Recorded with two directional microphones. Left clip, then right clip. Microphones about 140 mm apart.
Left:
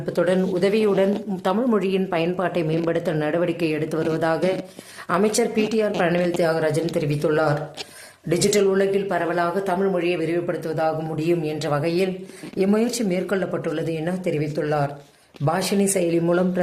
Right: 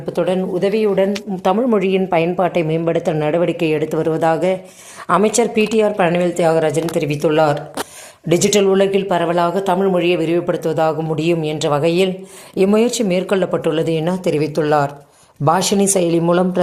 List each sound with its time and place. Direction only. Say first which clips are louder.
0.0 s a woman's voice: right 3 dB; 10° right (ahead or behind)